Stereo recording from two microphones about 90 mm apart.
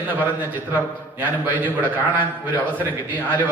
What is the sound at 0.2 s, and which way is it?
A man's voice, 20° right (ahead or behind).